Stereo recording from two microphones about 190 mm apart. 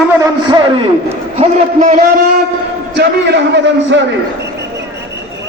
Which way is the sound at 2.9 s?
65° right (ahead or behind).